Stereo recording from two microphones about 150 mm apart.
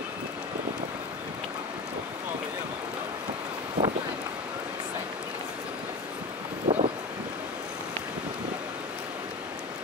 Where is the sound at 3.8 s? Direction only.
55° right (ahead or behind).